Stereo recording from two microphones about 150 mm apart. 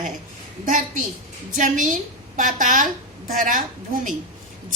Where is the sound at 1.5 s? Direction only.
60° right (ahead or behind).